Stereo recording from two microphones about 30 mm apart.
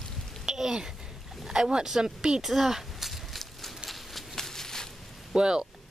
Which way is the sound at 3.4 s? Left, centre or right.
Centre.